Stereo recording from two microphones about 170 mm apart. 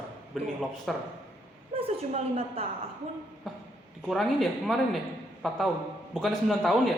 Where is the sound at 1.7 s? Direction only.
35° right (ahead or behind).